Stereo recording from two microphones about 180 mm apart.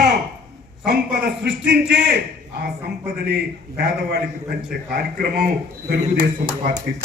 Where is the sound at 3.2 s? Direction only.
60° right (ahead or behind).